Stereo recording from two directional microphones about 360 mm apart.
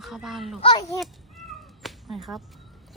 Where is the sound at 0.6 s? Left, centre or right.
Centre.